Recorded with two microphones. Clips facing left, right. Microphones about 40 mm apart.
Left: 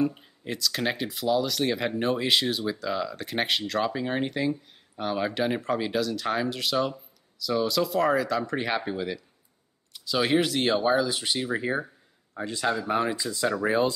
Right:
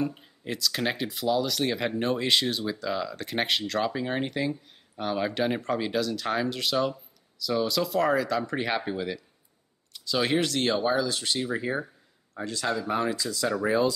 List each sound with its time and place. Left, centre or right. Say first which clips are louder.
0.0 s speech: left 3 dB; centre; by 13.7 s left